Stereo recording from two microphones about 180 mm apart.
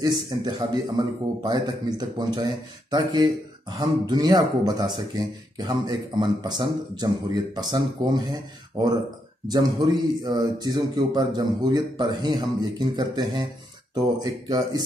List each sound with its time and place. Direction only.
0.0 s a man's voice: 25° right (ahead or behind)